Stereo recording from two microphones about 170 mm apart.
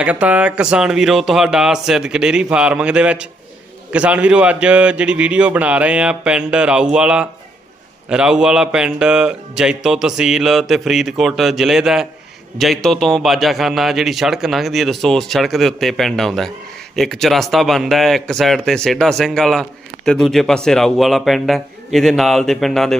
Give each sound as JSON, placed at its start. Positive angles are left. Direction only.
{"t": 0.0, "sound": "a man's voice", "side_deg": -10}